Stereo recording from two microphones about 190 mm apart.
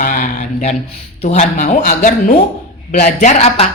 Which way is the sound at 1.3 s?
40° left (ahead or behind).